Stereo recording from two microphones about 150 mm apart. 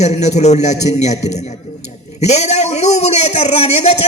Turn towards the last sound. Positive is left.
turn(degrees=45)  # may be behind; listen again after turning